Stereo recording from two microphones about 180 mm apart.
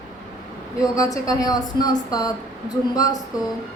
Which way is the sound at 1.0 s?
20° left (ahead or behind).